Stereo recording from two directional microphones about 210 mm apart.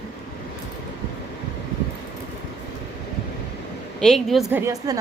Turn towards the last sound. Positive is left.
turn(degrees=-15)  # may be behind; listen again after turning